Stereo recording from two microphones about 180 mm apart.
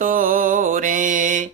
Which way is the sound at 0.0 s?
50° right (ahead or behind).